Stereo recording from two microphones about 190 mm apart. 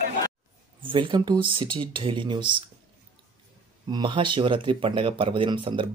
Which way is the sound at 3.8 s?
25° right (ahead or behind).